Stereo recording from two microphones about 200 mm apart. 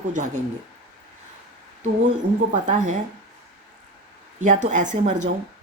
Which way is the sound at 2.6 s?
35° right (ahead or behind).